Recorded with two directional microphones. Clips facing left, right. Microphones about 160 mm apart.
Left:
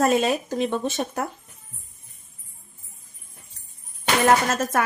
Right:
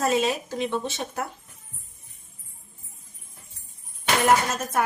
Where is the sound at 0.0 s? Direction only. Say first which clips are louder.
Left 3 dB; 50° left (ahead or behind).